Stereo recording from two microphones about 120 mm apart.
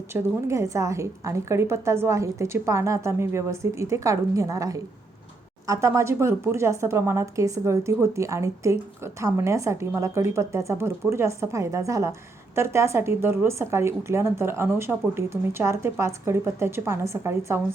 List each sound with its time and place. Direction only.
0.1 s speech: 25° right (ahead or behind)